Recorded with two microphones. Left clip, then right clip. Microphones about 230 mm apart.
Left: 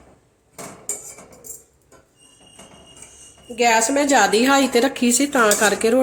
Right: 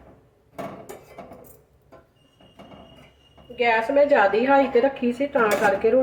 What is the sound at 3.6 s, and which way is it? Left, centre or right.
A woman's voice, left.